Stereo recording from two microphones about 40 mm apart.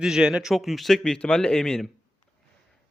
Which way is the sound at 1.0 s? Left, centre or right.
Left.